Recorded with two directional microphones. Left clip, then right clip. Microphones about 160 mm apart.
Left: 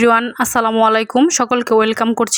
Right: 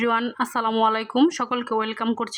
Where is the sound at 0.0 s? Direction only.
35° left (ahead or behind).